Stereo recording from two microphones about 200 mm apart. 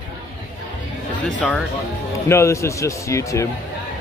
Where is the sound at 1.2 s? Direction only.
5° left (ahead or behind).